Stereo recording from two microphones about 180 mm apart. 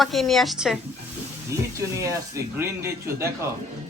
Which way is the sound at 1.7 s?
15° right (ahead or behind).